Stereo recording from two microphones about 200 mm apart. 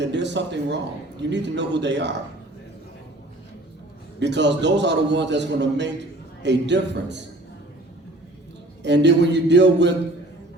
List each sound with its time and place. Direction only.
0.0 s a man's voice: 60° right (ahead or behind)
4.2 s a man's voice: 60° right (ahead or behind)
8.8 s a man's voice: 60° right (ahead or behind)